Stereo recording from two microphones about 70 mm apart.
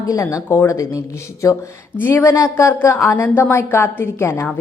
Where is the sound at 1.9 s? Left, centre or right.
Left.